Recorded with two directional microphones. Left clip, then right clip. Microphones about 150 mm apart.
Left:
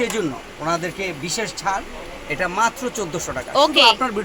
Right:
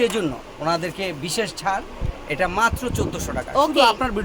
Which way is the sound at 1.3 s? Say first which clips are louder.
Even; 65° right (ahead or behind).